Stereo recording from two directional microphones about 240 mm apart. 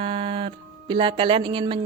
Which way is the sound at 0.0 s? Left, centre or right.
Right.